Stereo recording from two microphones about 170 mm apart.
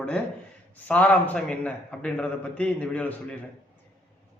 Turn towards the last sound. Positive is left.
turn(degrees=10)  # may be behind; listen again after turning